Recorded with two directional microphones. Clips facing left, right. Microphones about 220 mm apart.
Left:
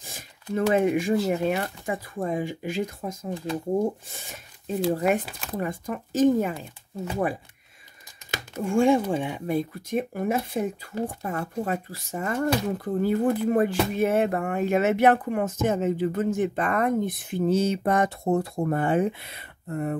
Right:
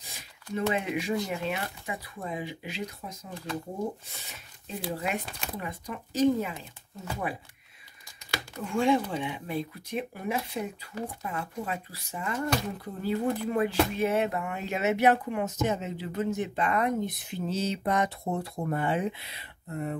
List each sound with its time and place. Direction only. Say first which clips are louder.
0.0 s a sound: left 6 dB; 45° left (ahead or behind)
1.3 s speech: left 7 dB; 50° left (ahead or behind)
4.3 s speech: left 9 dB; 50° left (ahead or behind)
8.6 s speech: left 5 dB; 50° left (ahead or behind)